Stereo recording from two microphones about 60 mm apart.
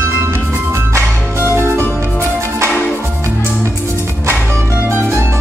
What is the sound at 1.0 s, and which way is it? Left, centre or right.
Music, right.